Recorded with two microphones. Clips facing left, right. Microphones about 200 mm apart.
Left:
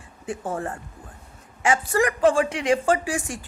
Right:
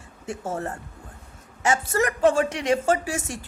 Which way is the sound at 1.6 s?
45° right (ahead or behind).